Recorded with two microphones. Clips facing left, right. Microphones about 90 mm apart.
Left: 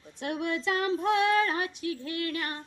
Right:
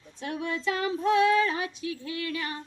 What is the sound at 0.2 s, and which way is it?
Female singing, 65° left (ahead or behind).